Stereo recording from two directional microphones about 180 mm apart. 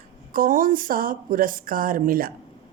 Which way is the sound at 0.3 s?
50° right (ahead or behind).